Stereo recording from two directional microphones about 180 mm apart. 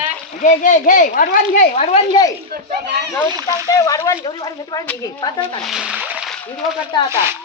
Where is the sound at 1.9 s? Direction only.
25° left (ahead or behind).